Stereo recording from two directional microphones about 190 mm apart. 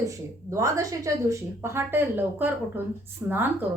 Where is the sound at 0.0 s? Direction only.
15° right (ahead or behind).